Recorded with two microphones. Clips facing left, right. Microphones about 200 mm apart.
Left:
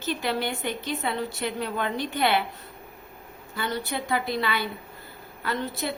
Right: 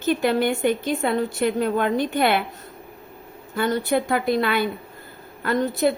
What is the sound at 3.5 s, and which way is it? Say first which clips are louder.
A woman's voice: right 9 dB; 50° right (ahead or behind).